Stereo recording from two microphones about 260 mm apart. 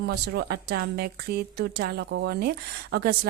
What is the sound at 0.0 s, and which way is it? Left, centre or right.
Speech, right.